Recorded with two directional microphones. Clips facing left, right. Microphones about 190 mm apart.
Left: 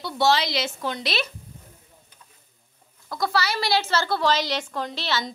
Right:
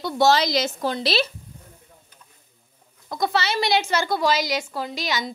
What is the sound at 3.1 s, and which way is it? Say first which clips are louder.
A woman's voice: right 2 dB; 20° right (ahead or behind).